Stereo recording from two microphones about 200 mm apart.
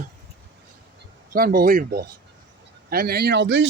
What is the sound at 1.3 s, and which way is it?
Speech, 45° right (ahead or behind).